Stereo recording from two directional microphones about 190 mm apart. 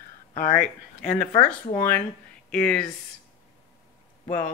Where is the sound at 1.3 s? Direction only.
10° left (ahead or behind).